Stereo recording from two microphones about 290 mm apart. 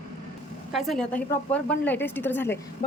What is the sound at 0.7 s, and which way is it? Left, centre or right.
A woman's voice, centre.